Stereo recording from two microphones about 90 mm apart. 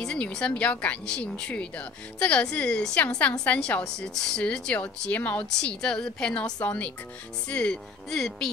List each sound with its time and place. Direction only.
0.0 s speech: 10° left (ahead or behind)